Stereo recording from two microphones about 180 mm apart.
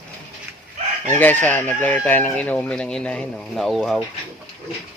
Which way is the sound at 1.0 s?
10° left (ahead or behind).